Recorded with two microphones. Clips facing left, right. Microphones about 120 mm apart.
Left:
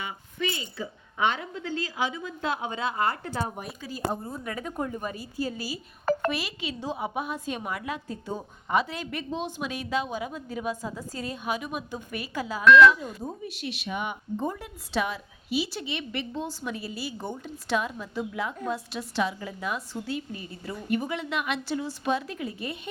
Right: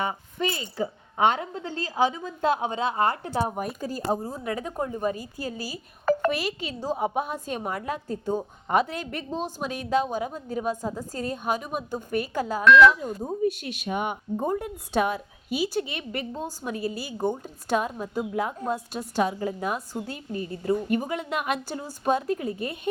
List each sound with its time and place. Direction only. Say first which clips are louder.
0.0 s a woman's voice: right 5 dB; 40° right (ahead or behind)
5.1 s a woman's voice: left 1 dB; 45° right (ahead or behind)
12.6 s speech: even; centre (ahead or behind)
13.4 s a woman's voice: right 9 dB; 50° right (ahead or behind)